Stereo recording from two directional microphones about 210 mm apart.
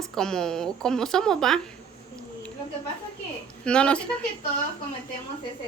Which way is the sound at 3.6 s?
5° left (ahead or behind).